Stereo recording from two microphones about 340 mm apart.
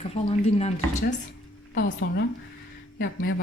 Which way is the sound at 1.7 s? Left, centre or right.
Left.